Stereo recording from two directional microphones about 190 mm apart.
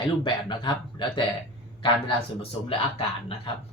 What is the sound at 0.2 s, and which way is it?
Speech, 25° left (ahead or behind).